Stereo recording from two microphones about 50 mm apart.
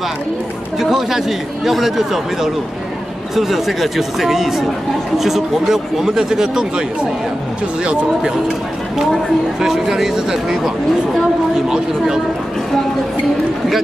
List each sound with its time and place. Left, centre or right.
0.7 s speech: centre
7.8 s speech: centre
9.6 s speech: centre